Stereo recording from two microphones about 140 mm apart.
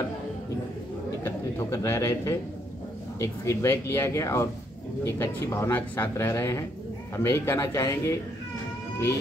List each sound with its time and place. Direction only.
1.2 s a man's voice: 20° left (ahead or behind)